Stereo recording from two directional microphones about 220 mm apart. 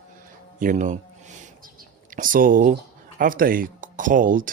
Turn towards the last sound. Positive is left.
turn(degrees=-40)  # may be behind; listen again after turning